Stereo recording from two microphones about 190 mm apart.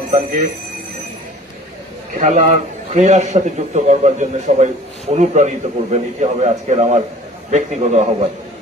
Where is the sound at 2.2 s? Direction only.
35° right (ahead or behind).